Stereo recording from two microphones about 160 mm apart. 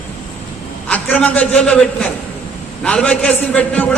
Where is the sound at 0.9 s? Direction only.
10° left (ahead or behind).